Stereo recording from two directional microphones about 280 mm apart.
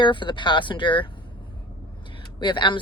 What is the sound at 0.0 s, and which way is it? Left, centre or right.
Speech, centre.